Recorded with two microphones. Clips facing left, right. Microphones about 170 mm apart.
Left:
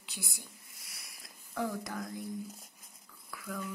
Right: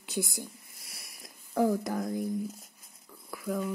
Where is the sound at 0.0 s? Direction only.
45° right (ahead or behind).